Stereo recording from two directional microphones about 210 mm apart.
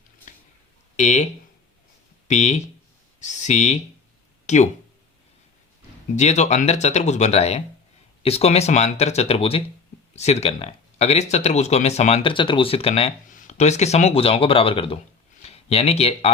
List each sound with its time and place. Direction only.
0.9 s speech: 35° left (ahead or behind)
6.1 s speech: 35° left (ahead or behind)